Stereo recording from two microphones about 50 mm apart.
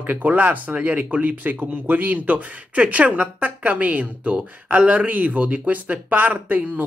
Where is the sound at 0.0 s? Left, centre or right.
Right.